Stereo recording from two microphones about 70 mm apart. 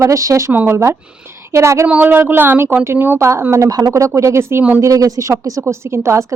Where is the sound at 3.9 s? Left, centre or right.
Right.